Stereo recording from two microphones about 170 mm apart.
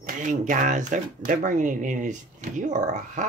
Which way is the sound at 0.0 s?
50° right (ahead or behind).